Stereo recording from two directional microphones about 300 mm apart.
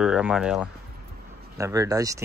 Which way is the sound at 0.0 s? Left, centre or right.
Centre.